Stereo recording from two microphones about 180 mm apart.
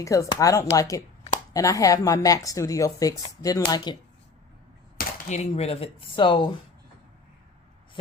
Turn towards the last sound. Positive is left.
turn(degrees=30)  # may be behind; listen again after turning